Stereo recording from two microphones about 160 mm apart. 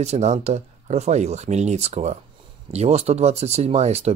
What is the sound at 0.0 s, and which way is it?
Speech, 45° right (ahead or behind).